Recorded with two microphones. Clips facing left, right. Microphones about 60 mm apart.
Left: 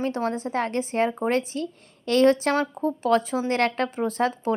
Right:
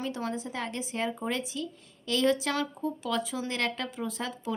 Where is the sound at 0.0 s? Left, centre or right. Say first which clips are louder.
Left 7 dB; left.